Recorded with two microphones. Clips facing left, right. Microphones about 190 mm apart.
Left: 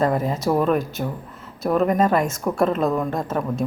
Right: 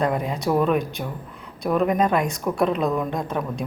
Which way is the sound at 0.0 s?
Centre (ahead or behind).